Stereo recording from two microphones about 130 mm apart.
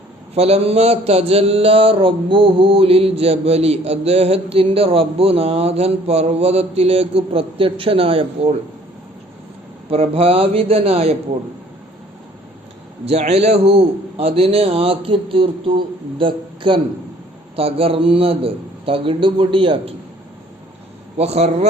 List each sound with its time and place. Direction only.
0.3 s mantra: 50° right (ahead or behind)
9.9 s mantra: 50° right (ahead or behind)
13.1 s mantra: 55° right (ahead or behind)
21.2 s mantra: 55° right (ahead or behind)